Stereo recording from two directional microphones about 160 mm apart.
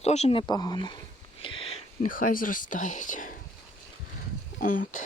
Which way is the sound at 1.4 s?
35° left (ahead or behind).